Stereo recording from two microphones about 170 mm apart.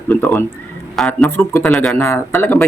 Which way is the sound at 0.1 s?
10° left (ahead or behind).